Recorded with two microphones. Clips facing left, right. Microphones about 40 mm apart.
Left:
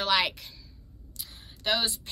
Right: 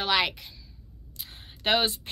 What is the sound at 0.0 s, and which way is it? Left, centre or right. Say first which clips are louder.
Speech: even; centre.